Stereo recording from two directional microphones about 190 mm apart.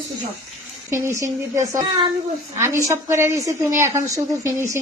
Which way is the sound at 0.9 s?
15° right (ahead or behind).